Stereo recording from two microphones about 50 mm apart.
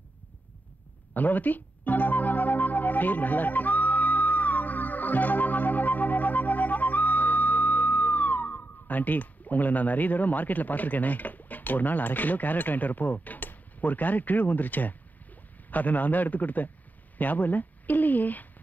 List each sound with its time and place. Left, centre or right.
1.1 s music: left
15.7 s speech: left